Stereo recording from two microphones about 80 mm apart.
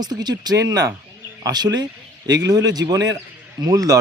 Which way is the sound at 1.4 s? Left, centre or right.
Right.